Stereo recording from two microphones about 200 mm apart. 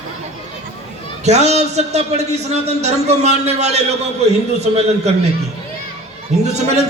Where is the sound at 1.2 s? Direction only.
35° right (ahead or behind).